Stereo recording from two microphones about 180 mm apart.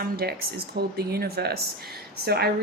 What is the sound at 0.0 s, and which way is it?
Speech, 60° right (ahead or behind).